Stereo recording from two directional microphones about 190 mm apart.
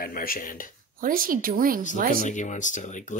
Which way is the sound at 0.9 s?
45° right (ahead or behind).